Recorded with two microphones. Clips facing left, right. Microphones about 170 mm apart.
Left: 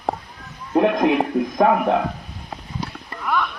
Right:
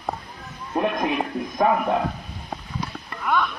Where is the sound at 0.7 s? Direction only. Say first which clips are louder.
Left 7 dB; 80° left.